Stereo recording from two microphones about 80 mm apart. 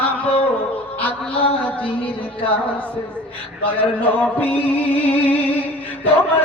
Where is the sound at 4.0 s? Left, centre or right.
Centre.